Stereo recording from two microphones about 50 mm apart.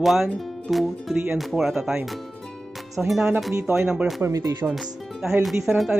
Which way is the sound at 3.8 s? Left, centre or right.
Centre.